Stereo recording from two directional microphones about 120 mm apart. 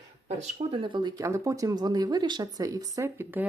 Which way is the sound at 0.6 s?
45° right (ahead or behind).